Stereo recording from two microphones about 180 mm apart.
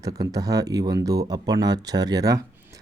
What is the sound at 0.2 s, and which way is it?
Speech, 20° right (ahead or behind).